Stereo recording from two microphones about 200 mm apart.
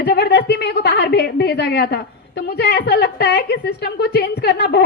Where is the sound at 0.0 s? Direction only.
55° left (ahead or behind).